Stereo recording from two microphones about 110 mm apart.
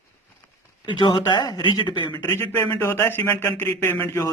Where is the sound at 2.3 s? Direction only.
20° left (ahead or behind).